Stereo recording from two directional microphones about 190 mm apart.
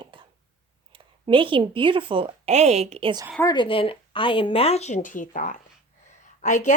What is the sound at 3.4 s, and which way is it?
Speech, 20° left (ahead or behind).